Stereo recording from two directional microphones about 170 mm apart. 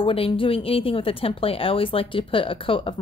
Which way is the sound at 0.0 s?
30° left (ahead or behind).